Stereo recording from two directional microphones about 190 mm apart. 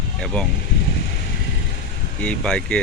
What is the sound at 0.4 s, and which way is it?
Speech, centre (ahead or behind).